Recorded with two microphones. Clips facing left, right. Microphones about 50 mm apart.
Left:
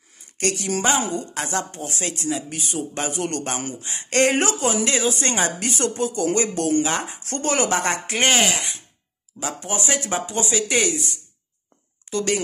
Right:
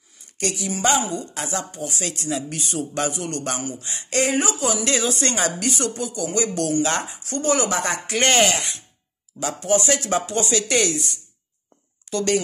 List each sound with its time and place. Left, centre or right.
0.5 s speech: left
1.0 s speech: left
2.3 s speech: centre
3.1 s speech: left
3.8 s a man's voice: left
4.1 s speech: left
4.8 s speech: left
7.1 s speech: left
8.3 s speech: centre
9.4 s a man's voice: left
10.1 s speech: centre
12.1 s a sound: left